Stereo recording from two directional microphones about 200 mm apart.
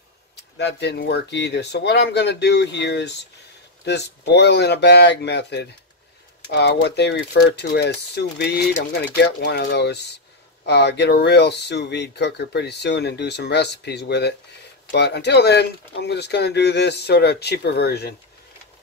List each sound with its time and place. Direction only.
0.4 s speech: 60° left (ahead or behind)